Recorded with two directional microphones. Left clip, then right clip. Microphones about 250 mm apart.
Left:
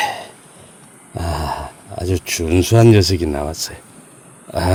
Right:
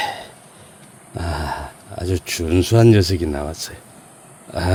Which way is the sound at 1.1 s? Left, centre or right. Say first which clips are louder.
Left 3 dB; centre.